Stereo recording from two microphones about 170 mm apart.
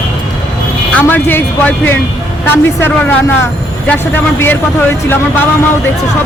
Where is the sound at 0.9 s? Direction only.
10° left (ahead or behind).